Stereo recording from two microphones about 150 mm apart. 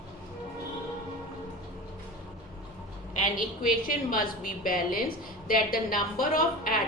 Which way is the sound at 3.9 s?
65° left (ahead or behind).